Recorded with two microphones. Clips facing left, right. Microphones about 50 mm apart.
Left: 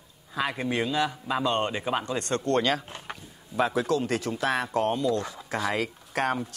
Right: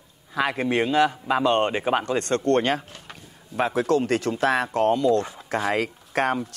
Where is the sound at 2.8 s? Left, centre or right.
Left.